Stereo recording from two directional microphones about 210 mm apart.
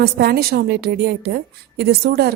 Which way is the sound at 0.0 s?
50° right (ahead or behind).